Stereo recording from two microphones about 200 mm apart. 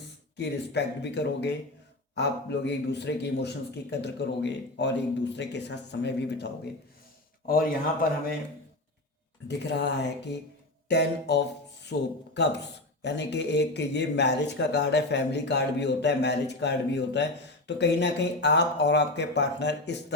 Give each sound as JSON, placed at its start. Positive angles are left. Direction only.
{"t": 0.3, "sound": "speech", "side_deg": 60}
{"t": 9.5, "sound": "speech", "side_deg": 60}